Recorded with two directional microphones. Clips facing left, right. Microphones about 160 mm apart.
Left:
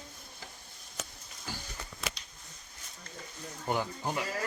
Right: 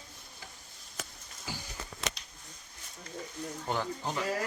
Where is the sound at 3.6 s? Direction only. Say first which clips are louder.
Left 2 dB; 10° left (ahead or behind).